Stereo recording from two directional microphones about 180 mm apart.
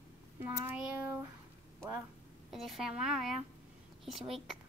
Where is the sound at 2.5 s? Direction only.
Centre (ahead or behind).